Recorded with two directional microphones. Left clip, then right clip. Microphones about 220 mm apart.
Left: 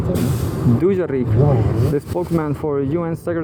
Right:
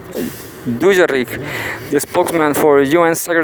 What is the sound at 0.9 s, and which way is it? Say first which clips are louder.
Speech: right 10 dB; 60° right (ahead or behind).